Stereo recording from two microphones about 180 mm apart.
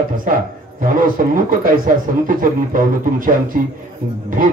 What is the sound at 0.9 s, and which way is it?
A man's voice, 50° right (ahead or behind).